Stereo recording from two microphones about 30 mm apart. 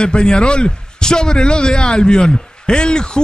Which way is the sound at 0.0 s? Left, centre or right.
Left.